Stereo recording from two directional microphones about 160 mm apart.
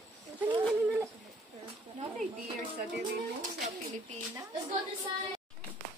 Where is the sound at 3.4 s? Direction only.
45° right (ahead or behind).